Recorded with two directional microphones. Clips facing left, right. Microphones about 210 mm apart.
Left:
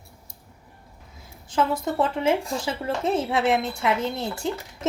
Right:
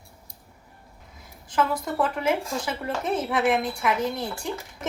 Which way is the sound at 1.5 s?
25° left (ahead or behind).